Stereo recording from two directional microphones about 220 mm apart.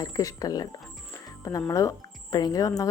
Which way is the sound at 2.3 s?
15° left (ahead or behind).